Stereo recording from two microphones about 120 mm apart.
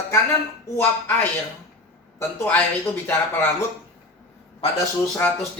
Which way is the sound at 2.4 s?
15° left (ahead or behind).